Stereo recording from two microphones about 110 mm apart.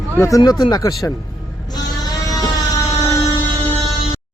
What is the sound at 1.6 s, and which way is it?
Sheep, 35° left (ahead or behind).